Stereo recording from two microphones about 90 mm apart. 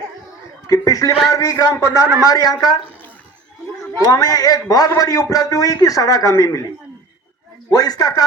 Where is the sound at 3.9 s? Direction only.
45° left (ahead or behind).